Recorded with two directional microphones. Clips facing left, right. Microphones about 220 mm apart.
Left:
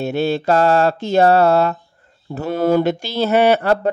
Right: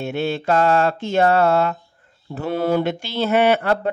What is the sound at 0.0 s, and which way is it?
Mantra, 40° left (ahead or behind).